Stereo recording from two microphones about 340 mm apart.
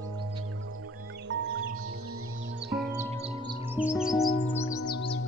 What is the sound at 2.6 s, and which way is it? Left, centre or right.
Music, centre.